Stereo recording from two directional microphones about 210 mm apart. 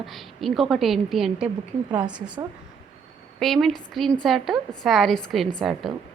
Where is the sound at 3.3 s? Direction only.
Centre (ahead or behind).